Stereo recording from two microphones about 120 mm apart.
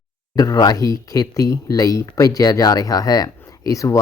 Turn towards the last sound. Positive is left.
turn(degrees=30)  # may be behind; listen again after turning